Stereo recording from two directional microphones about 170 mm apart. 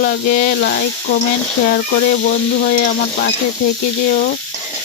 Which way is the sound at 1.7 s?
60° left (ahead or behind).